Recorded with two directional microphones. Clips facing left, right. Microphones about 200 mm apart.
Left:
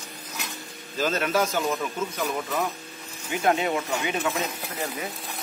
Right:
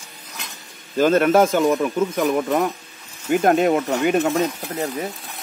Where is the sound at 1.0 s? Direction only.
55° right (ahead or behind).